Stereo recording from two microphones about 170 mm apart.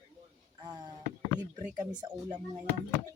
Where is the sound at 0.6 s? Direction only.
25° right (ahead or behind).